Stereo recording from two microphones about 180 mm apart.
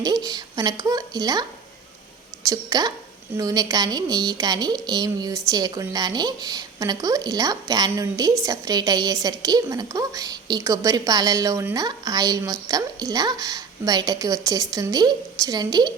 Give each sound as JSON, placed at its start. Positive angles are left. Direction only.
{"t": 0.0, "sound": "a woman's voice", "side_deg": -20}
{"t": 2.5, "sound": "a woman's voice", "side_deg": -20}